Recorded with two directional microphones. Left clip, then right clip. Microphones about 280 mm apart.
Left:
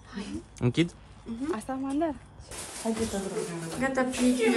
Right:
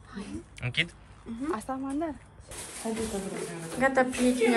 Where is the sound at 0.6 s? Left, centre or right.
Centre.